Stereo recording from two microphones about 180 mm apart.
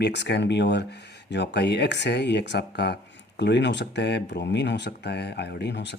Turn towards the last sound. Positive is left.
turn(degrees=70)  # may be behind; listen again after turning